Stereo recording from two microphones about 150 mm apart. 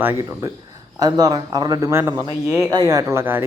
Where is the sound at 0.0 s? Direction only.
20° right (ahead or behind).